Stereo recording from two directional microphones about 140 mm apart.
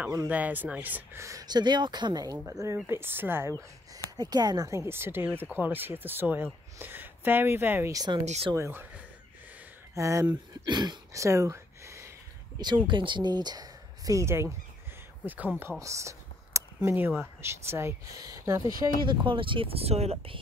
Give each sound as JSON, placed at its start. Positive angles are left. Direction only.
{"t": 0.3, "sound": "speech", "side_deg": -10}
{"t": 7.9, "sound": "speech", "side_deg": -25}
{"t": 8.5, "sound": "speech", "side_deg": -15}
{"t": 12.5, "sound": "speech", "side_deg": -35}
{"t": 19.0, "sound": "speech", "side_deg": -35}